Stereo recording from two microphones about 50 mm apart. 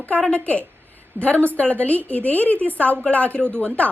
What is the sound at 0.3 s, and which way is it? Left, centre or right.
A woman's voice, left.